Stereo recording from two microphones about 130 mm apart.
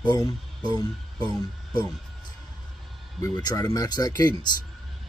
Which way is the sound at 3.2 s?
30° left (ahead or behind).